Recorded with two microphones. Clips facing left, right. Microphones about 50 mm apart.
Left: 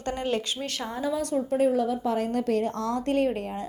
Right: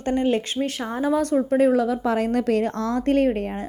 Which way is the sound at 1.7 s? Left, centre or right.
Right.